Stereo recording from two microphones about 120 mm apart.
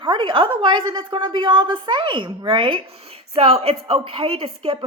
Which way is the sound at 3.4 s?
55° right (ahead or behind).